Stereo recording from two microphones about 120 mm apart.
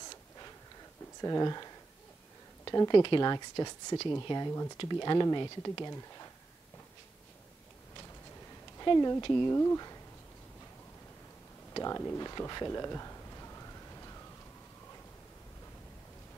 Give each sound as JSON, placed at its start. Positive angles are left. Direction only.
{"t": 1.2, "sound": "speech", "side_deg": 30}
{"t": 8.7, "sound": "speech", "side_deg": 30}
{"t": 9.5, "sound": "speech", "side_deg": 25}
{"t": 11.7, "sound": "a sound", "side_deg": 30}